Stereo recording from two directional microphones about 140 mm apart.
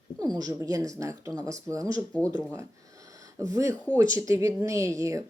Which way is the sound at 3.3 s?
20° right (ahead or behind).